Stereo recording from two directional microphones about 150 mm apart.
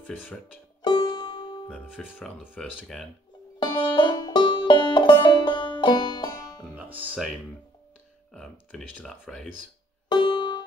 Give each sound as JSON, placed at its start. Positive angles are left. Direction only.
{"t": 0.8, "sound": "music", "side_deg": 30}
{"t": 1.7, "sound": "speech", "side_deg": 5}
{"t": 3.5, "sound": "banjo", "side_deg": 30}
{"t": 6.7, "sound": "music", "side_deg": -10}
{"t": 8.3, "sound": "speech", "side_deg": 5}
{"t": 10.0, "sound": "music", "side_deg": 30}